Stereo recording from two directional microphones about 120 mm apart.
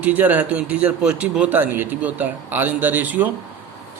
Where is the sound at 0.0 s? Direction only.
15° right (ahead or behind).